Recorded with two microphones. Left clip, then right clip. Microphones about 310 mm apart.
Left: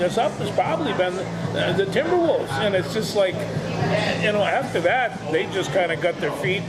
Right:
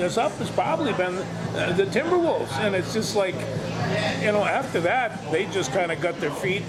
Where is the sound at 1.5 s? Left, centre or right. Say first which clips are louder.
Left 2 dB; right.